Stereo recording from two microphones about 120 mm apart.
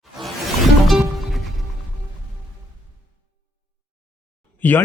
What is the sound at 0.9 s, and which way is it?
Music, centre (ahead or behind).